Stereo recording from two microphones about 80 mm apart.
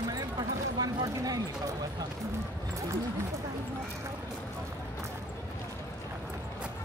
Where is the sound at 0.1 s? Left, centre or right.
Right.